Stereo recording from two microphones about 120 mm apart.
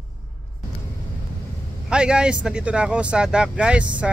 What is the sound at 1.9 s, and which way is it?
Speech, 5° right (ahead or behind).